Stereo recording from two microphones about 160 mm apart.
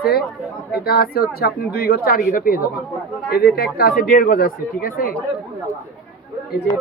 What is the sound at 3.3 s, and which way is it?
A woman's voice, 75° left (ahead or behind).